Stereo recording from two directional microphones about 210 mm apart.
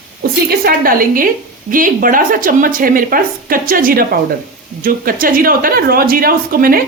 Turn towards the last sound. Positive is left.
turn(degrees=-45)  # may be behind; listen again after turning